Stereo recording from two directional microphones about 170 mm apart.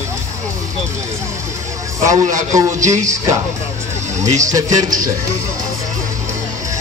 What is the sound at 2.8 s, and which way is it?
Speech, 45° right (ahead or behind).